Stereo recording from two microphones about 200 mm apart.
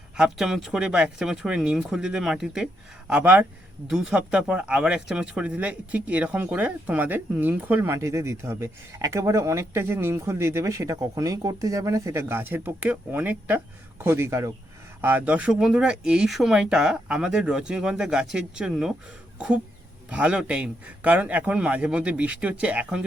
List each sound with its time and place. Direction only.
0.2 s speech: centre (ahead or behind)
20.1 s speech: 5° right (ahead or behind)